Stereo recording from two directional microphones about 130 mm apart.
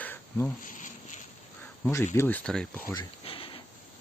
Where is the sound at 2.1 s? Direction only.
15° left (ahead or behind).